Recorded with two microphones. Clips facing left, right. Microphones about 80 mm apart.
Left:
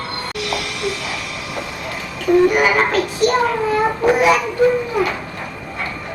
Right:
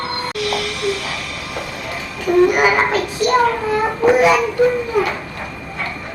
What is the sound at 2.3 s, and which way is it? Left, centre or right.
Babbling, centre.